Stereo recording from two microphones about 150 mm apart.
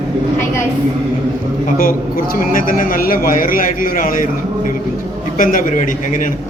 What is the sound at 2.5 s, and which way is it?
A man's voice, 65° left (ahead or behind).